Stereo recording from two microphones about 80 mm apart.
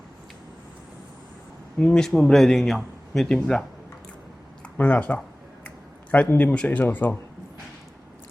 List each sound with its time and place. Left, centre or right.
1.9 s speech: centre
4.6 s speech: centre
5.6 s a sound: centre
6.2 s speech: left